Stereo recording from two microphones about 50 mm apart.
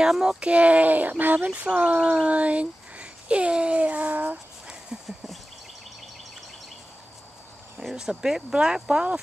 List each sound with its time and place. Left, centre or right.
0.0 s speech: centre; by 1.5 s right
1.5 s speech: right
7.9 s speech: centre